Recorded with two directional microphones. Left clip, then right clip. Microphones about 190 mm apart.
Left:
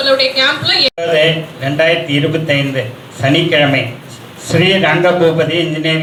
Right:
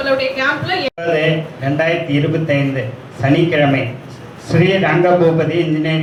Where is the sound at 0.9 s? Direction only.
25° left (ahead or behind).